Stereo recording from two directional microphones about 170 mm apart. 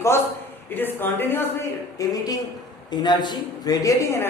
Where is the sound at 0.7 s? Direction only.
10° left (ahead or behind).